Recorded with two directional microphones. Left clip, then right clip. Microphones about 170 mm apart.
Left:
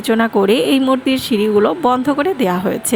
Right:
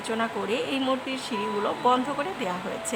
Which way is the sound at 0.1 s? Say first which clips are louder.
Left 14 dB; 40° left (ahead or behind).